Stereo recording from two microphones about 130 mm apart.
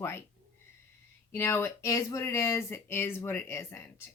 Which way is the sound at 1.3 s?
20° left (ahead or behind).